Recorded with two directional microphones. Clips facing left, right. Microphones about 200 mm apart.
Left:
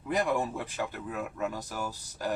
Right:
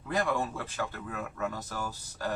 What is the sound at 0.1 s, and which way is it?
Speech, 15° left (ahead or behind).